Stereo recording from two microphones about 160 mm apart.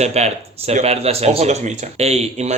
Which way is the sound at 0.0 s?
45° right (ahead or behind).